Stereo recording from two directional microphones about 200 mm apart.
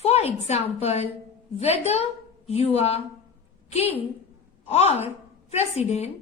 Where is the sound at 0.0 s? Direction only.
30° left (ahead or behind).